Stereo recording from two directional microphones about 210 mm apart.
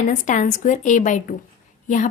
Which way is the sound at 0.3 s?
35° left (ahead or behind).